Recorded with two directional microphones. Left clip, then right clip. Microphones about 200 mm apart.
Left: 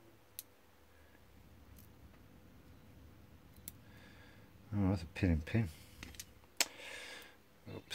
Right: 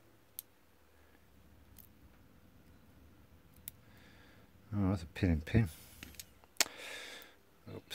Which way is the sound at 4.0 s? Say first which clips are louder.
Left 1 dB; 10° right (ahead or behind).